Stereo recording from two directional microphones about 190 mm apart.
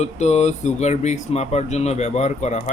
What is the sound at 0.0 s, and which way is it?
Speech, 35° left (ahead or behind).